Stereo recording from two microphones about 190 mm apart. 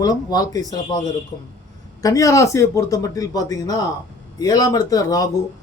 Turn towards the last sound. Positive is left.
turn(degrees=20)  # may be behind; listen again after turning